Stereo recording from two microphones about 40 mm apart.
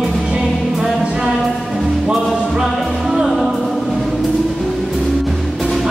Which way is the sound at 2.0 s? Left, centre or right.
Right.